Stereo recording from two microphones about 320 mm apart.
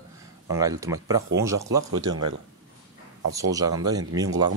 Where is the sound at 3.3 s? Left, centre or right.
Centre.